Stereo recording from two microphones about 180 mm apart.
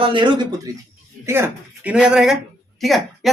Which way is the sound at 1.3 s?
10° right (ahead or behind).